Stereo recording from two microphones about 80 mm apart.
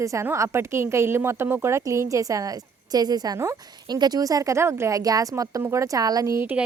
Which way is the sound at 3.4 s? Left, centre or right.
Right.